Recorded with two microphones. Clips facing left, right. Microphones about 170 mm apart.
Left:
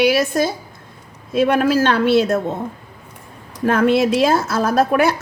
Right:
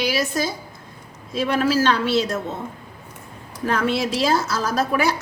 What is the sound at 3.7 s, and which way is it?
A woman's voice, 50° left (ahead or behind).